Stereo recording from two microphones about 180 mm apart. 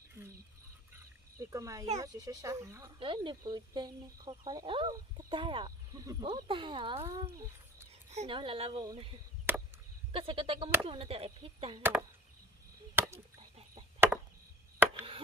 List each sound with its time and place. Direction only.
1.4 s speech: 15° right (ahead or behind)
3.0 s speech: 25° right (ahead or behind)
8.1 s speech: 35° right (ahead or behind)
9.5 s chop: 10° right (ahead or behind)
10.1 s speech: 30° right (ahead or behind)
12.9 s chop: 15° right (ahead or behind)
13.4 s a sound: 30° right (ahead or behind)
13.9 s chop: 15° right (ahead or behind)